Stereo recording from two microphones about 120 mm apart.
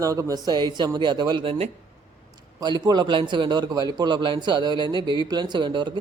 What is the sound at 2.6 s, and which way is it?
A man's voice, 35° right (ahead or behind).